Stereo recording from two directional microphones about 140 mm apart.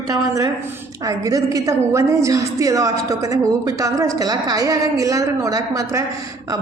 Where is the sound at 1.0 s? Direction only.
25° right (ahead or behind).